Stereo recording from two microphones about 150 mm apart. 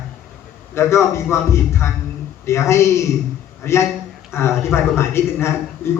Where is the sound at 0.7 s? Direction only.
15° left (ahead or behind).